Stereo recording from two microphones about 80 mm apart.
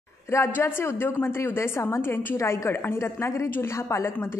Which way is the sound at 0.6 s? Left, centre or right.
Left.